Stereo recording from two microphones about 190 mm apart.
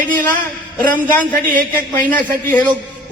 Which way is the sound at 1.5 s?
45° right (ahead or behind).